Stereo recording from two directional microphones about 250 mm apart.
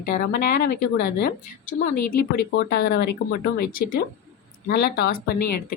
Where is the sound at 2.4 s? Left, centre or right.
Left.